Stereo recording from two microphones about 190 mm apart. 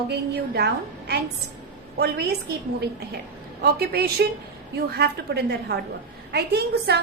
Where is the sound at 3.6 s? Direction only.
55° right (ahead or behind).